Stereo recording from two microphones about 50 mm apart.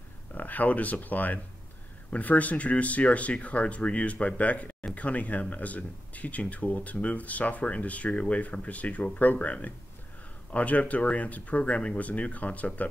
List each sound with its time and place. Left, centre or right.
0.3 s speech: left